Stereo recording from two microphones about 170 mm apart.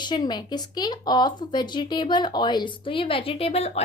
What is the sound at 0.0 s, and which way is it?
Speech, 25° left (ahead or behind).